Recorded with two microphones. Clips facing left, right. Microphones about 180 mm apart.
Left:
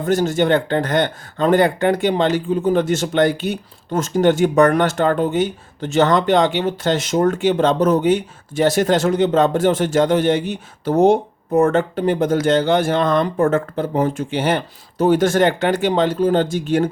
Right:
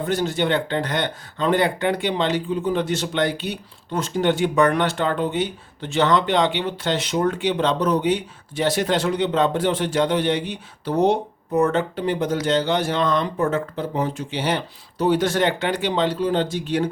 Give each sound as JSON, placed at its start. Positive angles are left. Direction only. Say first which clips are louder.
{"t": 0.0, "sound": "speech", "louder": "left 5 dB", "side_deg": 45}